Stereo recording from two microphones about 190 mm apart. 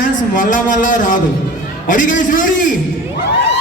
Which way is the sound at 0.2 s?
45° left (ahead or behind).